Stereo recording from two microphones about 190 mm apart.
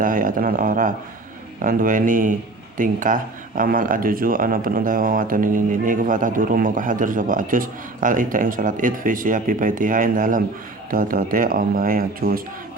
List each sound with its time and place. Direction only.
0.0 s speech: 45° right (ahead or behind)